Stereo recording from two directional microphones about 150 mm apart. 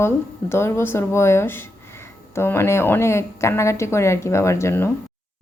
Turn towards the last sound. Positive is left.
turn(degrees=15)  # may be behind; listen again after turning